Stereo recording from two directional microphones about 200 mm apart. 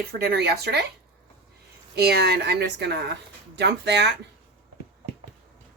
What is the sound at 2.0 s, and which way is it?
Speech, 55° right (ahead or behind).